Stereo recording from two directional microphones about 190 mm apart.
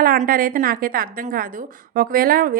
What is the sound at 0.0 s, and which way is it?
A woman's voice, 50° right (ahead or behind).